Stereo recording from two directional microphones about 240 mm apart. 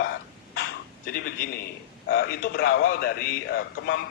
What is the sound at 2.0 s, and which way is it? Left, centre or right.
A man's voice, left.